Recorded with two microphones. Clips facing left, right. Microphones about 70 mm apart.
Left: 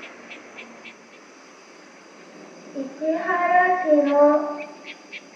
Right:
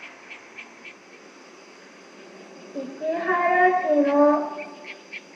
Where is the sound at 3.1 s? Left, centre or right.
Centre.